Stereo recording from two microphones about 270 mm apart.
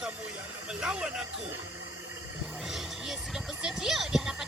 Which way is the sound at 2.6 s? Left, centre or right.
Centre.